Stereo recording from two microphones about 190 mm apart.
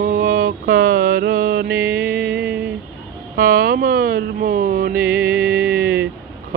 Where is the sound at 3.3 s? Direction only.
50° right (ahead or behind).